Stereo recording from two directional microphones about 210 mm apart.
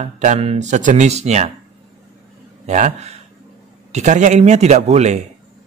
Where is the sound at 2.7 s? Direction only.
35° right (ahead or behind).